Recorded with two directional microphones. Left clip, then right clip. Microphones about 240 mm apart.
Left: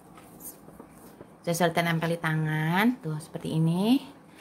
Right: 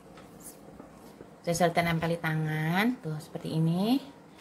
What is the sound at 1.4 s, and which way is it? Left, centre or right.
A woman's voice, centre.